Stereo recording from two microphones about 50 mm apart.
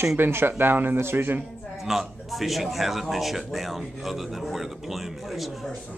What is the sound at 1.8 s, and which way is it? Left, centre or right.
Speech, centre.